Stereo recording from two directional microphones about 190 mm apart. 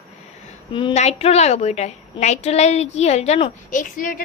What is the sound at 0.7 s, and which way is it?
A woman's voice, 25° left (ahead or behind).